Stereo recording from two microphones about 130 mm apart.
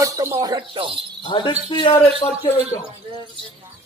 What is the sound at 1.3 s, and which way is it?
A man's voice, 40° left (ahead or behind).